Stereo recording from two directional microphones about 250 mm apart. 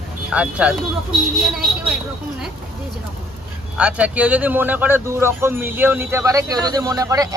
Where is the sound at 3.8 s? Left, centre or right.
Centre.